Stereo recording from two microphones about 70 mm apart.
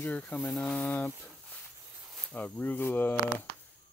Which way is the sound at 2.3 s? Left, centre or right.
Left.